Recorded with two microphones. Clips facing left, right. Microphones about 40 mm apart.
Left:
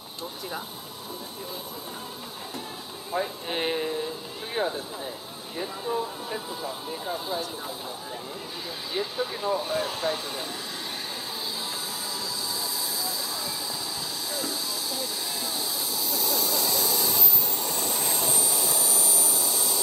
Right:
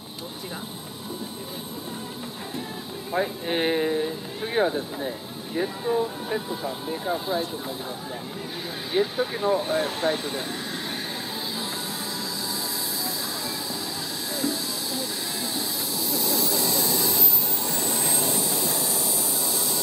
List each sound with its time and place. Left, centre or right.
3.1 s speech: right
8.9 s speech: right
14.3 s vehicle: centre